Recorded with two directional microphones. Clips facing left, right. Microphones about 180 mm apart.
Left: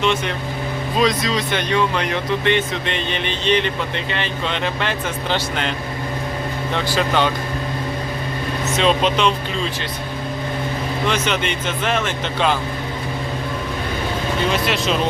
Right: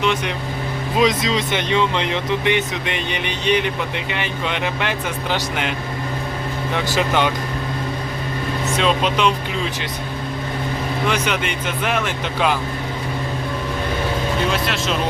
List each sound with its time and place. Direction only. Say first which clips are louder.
0.0 s speech: left 1 dB; 10° right (ahead or behind)
6.9 s speech: even; 15° right (ahead or behind)
8.8 s speech: left 1 dB; 5° right (ahead or behind)
11.1 s speech: left 1 dB; 10° right (ahead or behind)
14.5 s speech: left 2 dB; centre (ahead or behind)